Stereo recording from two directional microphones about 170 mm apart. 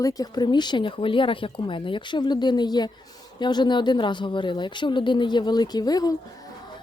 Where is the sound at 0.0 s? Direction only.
20° left (ahead or behind).